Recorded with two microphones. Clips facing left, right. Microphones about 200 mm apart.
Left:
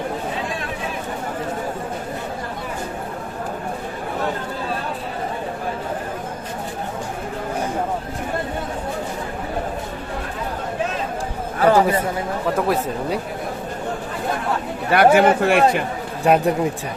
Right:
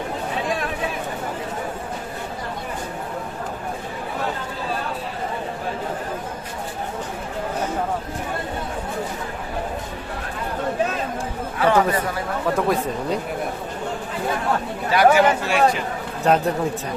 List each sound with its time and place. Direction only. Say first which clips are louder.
11.6 s chatter: left 3 dB; 35° left (ahead or behind)
12.6 s speech: left 1 dB; 5° left (ahead or behind)
14.8 s a man's voice: left 2 dB; 55° left (ahead or behind)
16.2 s speech: left 2 dB; 10° left (ahead or behind)